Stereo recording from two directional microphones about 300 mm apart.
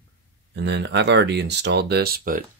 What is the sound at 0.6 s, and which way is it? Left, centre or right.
Speech, right.